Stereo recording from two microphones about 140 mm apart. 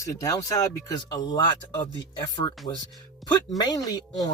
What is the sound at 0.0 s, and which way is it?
Speech, 25° left (ahead or behind).